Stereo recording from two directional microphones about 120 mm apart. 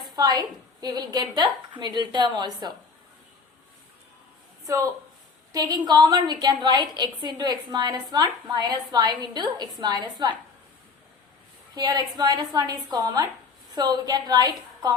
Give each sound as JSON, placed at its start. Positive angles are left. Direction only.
{"t": 0.2, "sound": "a woman's voice", "side_deg": -35}
{"t": 4.6, "sound": "a woman's voice", "side_deg": -25}
{"t": 11.7, "sound": "a woman's voice", "side_deg": -35}